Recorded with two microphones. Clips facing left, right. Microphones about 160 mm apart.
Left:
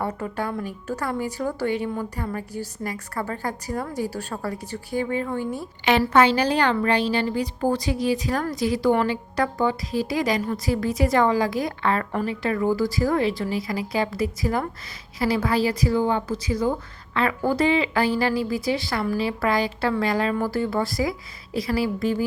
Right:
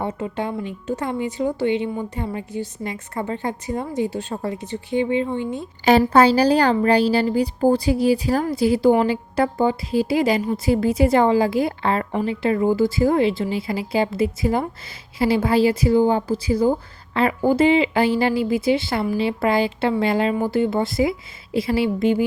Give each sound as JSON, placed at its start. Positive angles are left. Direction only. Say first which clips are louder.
{"t": 0.0, "sound": "speech", "louder": "right 2 dB", "side_deg": -20}
{"t": 6.1, "sound": "a woman's voice", "louder": "right 4 dB", "side_deg": -35}